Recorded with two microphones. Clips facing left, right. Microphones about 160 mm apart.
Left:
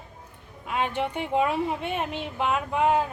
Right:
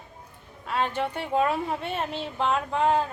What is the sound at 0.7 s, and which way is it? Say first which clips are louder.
A woman's voice: even; 15° left (ahead or behind).